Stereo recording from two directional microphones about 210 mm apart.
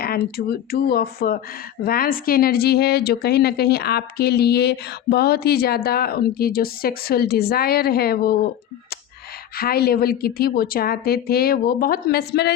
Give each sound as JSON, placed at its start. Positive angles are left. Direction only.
{"t": 0.3, "sound": "speech", "side_deg": 45}
{"t": 9.6, "sound": "speech", "side_deg": 45}